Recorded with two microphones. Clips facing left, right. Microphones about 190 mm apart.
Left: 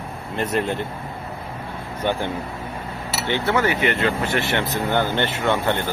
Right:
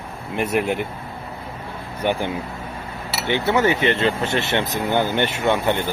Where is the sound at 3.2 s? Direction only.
15° right (ahead or behind).